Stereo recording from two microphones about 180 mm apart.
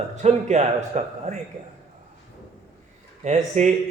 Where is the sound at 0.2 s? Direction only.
40° right (ahead or behind).